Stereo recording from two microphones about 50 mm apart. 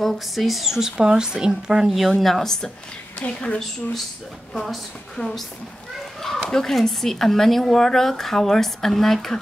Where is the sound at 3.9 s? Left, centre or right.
Centre.